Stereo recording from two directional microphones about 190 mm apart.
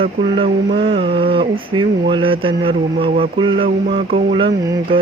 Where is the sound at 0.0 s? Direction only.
30° right (ahead or behind).